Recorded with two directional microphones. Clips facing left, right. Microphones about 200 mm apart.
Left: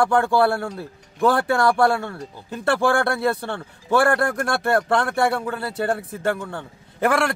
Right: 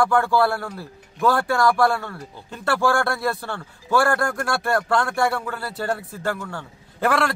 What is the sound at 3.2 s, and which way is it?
Speech, 20° left (ahead or behind).